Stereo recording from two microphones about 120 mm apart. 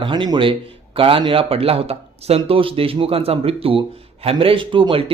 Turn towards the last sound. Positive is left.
turn(degrees=-45)  # may be behind; listen again after turning